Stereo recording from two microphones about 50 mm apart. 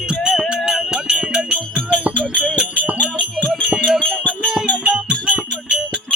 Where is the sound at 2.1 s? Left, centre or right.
Left.